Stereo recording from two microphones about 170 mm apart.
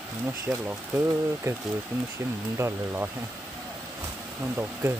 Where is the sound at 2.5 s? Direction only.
15° right (ahead or behind).